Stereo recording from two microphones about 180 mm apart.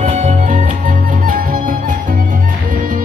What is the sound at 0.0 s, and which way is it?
Music, 40° right (ahead or behind).